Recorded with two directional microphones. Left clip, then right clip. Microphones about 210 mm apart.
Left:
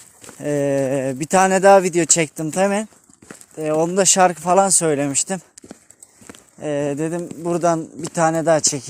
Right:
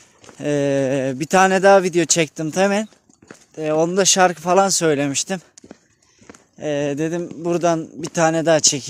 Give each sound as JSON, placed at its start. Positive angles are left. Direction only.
{"t": 0.3, "sound": "speech", "side_deg": -15}
{"t": 6.6, "sound": "speech", "side_deg": -10}